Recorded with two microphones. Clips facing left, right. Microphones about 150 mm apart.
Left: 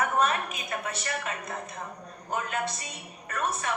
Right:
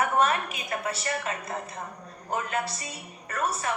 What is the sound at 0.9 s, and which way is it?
Speech, 35° right (ahead or behind).